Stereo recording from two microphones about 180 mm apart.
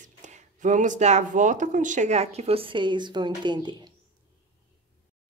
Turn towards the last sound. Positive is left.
turn(degrees=-25)  # may be behind; listen again after turning